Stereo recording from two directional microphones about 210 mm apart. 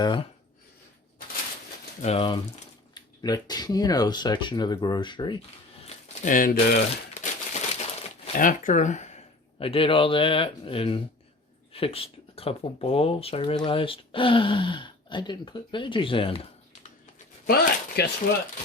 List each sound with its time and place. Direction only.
0.0 s speech: 20° left (ahead or behind)
2.0 s speech: 30° left (ahead or behind)
5.8 s crumpling: 35° left (ahead or behind)
8.2 s speech: 40° left (ahead or behind)
17.4 s speech: 50° left (ahead or behind)